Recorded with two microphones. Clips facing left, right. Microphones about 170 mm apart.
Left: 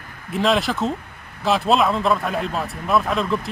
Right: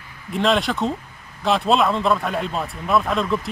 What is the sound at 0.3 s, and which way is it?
Speech, centre (ahead or behind).